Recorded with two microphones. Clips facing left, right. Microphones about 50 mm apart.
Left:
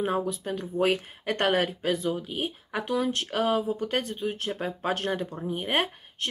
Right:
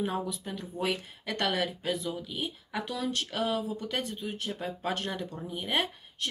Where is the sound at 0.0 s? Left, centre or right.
Left.